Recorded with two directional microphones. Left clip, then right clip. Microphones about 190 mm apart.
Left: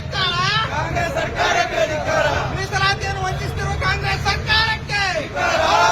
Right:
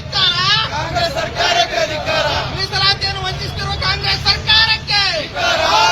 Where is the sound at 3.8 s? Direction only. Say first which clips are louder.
Right 4 dB; centre (ahead or behind).